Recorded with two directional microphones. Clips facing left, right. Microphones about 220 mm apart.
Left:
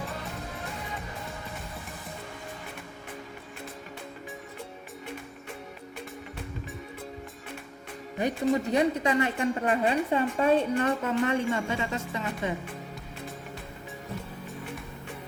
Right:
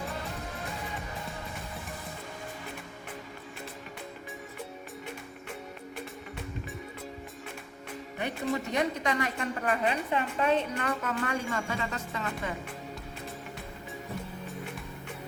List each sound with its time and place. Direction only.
8.7 s a woman's voice: 30° left (ahead or behind)